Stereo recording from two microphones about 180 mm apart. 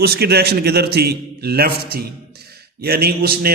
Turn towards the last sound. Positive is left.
turn(degrees=-60)  # may be behind; listen again after turning